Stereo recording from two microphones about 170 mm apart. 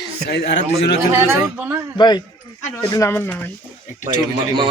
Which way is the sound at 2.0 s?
25° left (ahead or behind).